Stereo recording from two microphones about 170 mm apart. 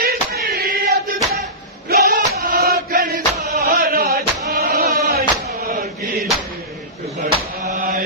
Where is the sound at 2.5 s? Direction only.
65° right (ahead or behind).